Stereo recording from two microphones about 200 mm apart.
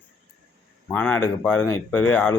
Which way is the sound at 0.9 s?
10° left (ahead or behind).